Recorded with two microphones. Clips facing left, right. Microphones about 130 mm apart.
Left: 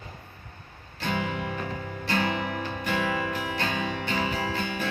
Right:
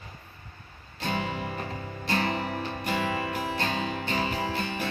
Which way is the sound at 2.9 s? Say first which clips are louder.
Left 1 dB; 35° right (ahead or behind).